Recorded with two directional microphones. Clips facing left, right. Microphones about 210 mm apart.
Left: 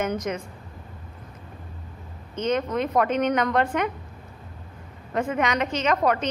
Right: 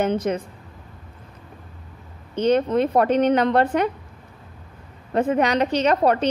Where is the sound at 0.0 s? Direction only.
30° right (ahead or behind).